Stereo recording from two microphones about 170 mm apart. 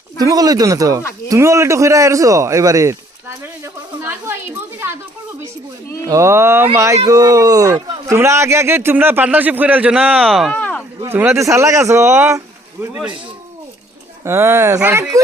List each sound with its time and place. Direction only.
0.2 s a man's voice: 20° right (ahead or behind)
6.1 s a man's voice: 15° right (ahead or behind); by 10.8 s 10° left (ahead or behind)
11.0 s a man's voice: 15° right (ahead or behind)
14.3 s a man's voice: 15° right (ahead or behind)